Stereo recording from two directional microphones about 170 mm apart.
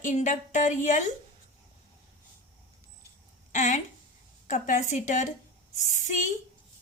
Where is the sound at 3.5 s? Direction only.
45° left (ahead or behind).